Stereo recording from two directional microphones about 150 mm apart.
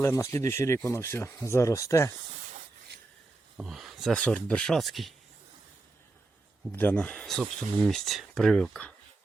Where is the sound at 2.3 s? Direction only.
45° right (ahead or behind).